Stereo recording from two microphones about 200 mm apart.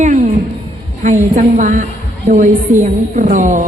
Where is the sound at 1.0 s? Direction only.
40° right (ahead or behind).